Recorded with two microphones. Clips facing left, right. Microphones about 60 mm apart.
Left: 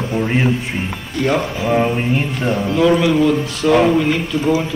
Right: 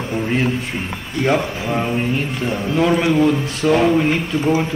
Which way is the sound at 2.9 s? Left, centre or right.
Right.